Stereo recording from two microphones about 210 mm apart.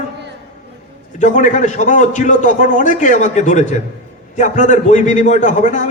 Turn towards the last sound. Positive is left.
turn(degrees=35)  # may be behind; listen again after turning